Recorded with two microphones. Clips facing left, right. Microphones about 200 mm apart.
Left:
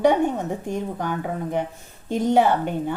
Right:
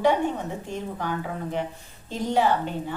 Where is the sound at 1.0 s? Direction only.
50° left (ahead or behind).